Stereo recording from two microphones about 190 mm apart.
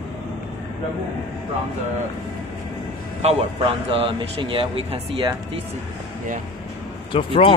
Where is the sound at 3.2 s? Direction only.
35° right (ahead or behind).